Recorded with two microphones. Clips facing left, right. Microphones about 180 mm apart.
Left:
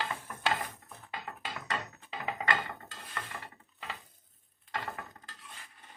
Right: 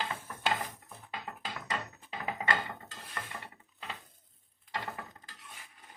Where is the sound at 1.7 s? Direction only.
5° right (ahead or behind).